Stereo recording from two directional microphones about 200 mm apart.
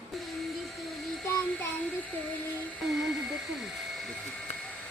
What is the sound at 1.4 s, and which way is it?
Child singing, 5° left (ahead or behind).